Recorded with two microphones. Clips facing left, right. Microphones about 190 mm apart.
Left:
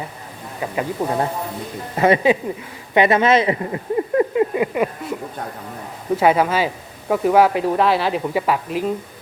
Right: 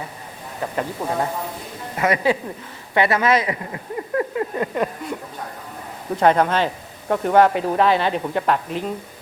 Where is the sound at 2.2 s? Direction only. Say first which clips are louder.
Left 3 dB; 20° left (ahead or behind).